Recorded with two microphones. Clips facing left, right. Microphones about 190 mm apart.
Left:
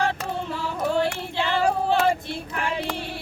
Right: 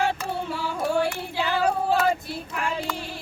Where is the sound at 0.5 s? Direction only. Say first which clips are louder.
Left 1 dB; 10° right (ahead or behind).